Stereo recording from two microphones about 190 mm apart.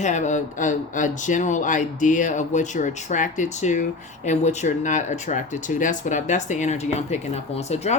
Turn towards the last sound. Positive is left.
turn(degrees=35)  # may be behind; listen again after turning